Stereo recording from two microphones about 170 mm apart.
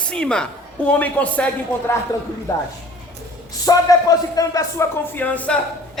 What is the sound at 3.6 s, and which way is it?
Speech, 20° left (ahead or behind).